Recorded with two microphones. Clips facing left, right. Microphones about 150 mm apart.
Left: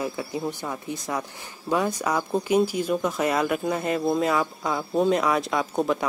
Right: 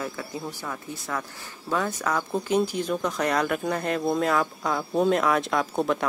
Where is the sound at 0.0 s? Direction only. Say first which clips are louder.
Left 4 dB; 15° left (ahead or behind).